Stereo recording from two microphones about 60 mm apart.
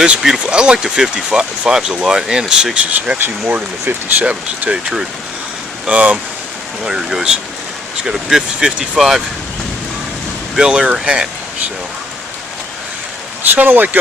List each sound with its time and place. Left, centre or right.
0.0 s speech: centre
3.5 s speech: right
5.9 s speech: right
6.8 s speech: centre
10.5 s speech: centre
13.5 s speech: right